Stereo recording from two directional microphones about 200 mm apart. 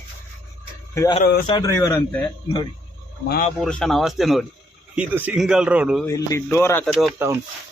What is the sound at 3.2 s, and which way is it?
Speech, 50° left (ahead or behind).